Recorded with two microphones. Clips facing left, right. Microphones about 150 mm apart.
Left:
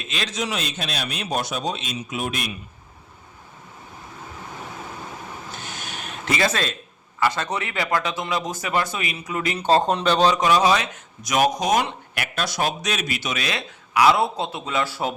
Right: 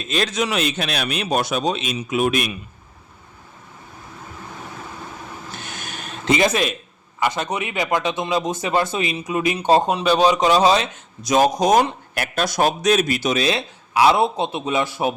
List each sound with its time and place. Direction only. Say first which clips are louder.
0.3 s a man's voice: right 6 dB; 65° right (ahead or behind)
5.8 s a sound: right 1 dB; 45° right (ahead or behind)
6.2 s speech: right 5 dB; 20° right (ahead or behind)